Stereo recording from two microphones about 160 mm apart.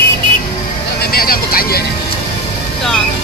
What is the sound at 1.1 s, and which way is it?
Vehicle, 65° left (ahead or behind).